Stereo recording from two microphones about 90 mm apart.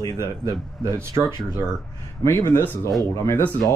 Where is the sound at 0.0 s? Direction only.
45° left (ahead or behind).